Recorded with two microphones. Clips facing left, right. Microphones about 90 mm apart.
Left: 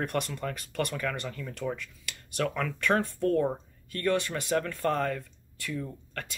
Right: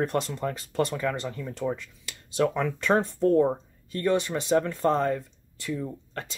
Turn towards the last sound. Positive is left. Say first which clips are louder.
# right 3 dB
turn(degrees=-20)  # may be behind; listen again after turning